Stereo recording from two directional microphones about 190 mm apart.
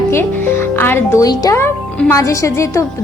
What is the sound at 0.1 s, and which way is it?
Speech, 15° left (ahead or behind).